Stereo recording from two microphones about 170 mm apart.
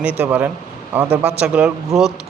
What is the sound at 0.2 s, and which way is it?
A man's voice, 10° right (ahead or behind).